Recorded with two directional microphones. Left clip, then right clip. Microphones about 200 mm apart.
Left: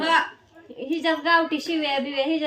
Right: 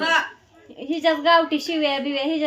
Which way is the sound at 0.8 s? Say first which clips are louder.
Right 3 dB; 25° right (ahead or behind).